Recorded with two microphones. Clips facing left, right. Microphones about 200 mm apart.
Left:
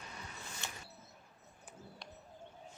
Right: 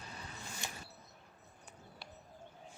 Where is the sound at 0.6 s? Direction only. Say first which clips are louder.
Right 1 dB; 15° right (ahead or behind).